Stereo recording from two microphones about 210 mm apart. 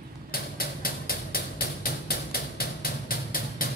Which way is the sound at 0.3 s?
45° left (ahead or behind).